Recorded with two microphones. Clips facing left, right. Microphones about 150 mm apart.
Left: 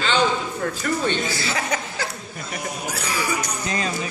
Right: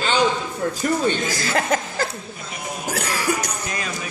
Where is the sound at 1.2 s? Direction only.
45° right (ahead or behind).